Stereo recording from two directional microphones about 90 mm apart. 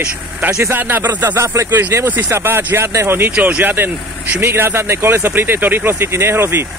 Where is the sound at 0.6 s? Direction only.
25° right (ahead or behind).